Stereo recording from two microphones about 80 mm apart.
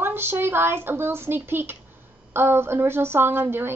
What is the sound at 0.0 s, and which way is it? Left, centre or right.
A woman's voice, right.